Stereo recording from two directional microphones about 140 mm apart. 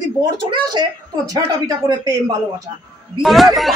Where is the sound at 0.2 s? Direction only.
30° right (ahead or behind).